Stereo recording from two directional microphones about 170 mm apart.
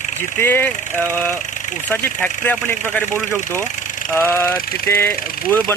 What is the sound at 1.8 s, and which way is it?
Speech, 10° left (ahead or behind).